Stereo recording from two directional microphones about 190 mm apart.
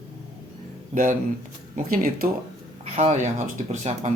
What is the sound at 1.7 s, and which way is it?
Speech, 50° right (ahead or behind).